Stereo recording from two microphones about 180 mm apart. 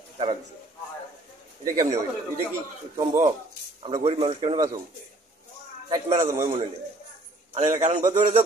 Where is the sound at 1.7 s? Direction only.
45° right (ahead or behind).